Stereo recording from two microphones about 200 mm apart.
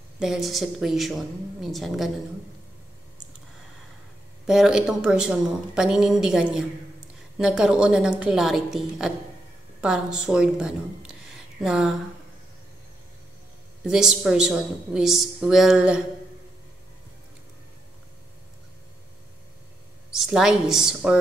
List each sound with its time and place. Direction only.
0.2 s speech: centre (ahead or behind)
4.5 s speech: 5° right (ahead or behind)
13.8 s speech: centre (ahead or behind)
20.1 s speech: centre (ahead or behind)